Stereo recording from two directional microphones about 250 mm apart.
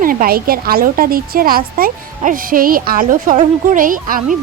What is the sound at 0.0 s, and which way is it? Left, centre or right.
A woman's voice, right.